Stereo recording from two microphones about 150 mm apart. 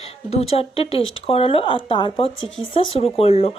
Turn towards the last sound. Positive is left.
turn(degrees=40)  # may be behind; listen again after turning